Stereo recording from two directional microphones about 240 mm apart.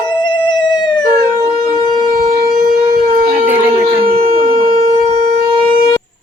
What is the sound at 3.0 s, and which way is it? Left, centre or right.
Shofar, right.